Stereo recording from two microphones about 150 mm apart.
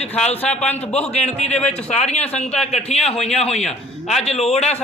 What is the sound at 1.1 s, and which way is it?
A man's voice, 45° left (ahead or behind).